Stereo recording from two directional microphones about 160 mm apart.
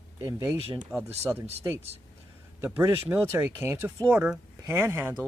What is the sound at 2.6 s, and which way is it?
Speech, 10° right (ahead or behind).